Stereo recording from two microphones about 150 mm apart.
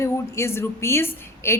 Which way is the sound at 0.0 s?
20° left (ahead or behind).